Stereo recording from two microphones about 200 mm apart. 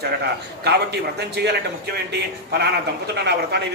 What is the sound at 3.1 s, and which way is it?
Speech, 55° right (ahead or behind).